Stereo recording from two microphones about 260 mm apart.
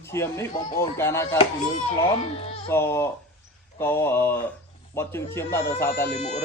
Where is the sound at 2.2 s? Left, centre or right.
Left.